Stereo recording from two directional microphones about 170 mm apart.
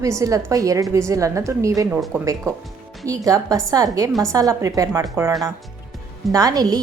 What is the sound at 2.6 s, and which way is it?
Music, centre (ahead or behind).